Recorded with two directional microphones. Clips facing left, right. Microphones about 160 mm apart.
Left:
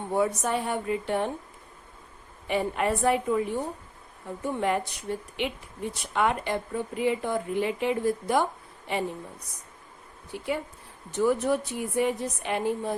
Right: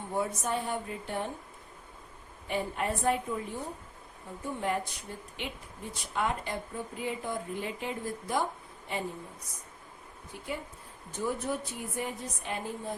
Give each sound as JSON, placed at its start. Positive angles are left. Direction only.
{"t": 0.1, "sound": "speech", "side_deg": 75}
{"t": 2.5, "sound": "speech", "side_deg": 75}
{"t": 10.3, "sound": "speech", "side_deg": 75}
{"t": 11.2, "sound": "speech", "side_deg": 85}